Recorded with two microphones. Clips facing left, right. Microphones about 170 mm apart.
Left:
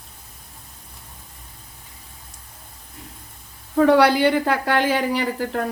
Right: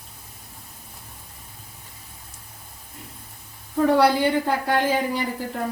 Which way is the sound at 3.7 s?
75° left (ahead or behind).